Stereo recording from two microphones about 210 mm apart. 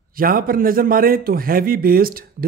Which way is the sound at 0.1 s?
45° right (ahead or behind).